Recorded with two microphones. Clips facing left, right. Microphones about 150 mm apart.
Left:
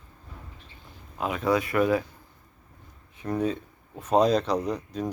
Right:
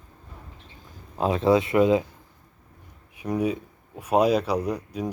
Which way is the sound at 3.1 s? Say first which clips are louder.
Right 2 dB; 10° right (ahead or behind).